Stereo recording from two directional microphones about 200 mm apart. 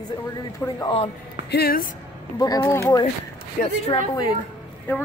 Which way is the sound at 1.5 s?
55° left (ahead or behind).